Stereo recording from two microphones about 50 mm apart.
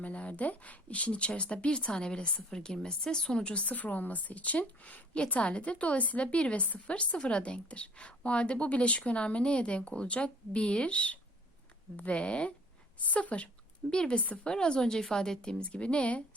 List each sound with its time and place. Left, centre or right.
0.0 s speech: left
2.5 s a woman's voice: centre